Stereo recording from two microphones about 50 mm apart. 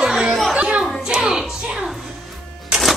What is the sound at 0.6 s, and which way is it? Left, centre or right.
Music, centre.